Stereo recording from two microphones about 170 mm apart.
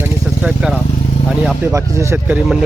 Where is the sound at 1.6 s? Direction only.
15° right (ahead or behind).